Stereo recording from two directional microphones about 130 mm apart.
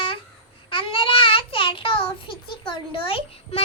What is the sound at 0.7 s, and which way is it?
Child singing, 45° left (ahead or behind).